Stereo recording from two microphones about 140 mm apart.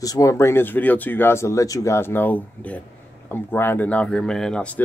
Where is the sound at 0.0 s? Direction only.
25° left (ahead or behind).